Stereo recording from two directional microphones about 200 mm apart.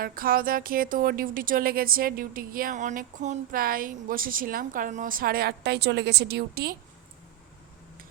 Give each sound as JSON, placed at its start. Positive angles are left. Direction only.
{"t": 0.0, "sound": "speech", "side_deg": -45}